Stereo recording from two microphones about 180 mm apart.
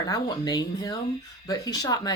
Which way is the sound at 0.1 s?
20° left (ahead or behind).